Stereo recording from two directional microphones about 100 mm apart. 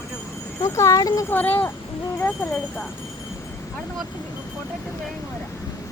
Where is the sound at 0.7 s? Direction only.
30° left (ahead or behind).